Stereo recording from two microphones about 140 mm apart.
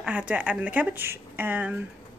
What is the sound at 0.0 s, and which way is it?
A woman's voice, 10° right (ahead or behind).